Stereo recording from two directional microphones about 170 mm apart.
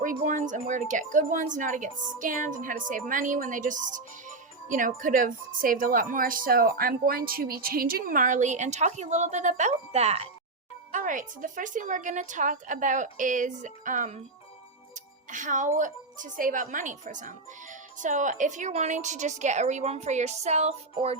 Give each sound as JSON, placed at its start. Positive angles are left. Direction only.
{"t": 0.0, "sound": "speech", "side_deg": -50}
{"t": 10.9, "sound": "speech", "side_deg": -50}
{"t": 15.3, "sound": "speech", "side_deg": -50}